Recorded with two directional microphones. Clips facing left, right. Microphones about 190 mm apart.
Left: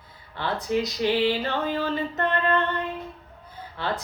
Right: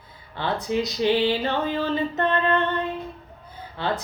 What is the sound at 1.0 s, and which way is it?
Female singing, 25° right (ahead or behind).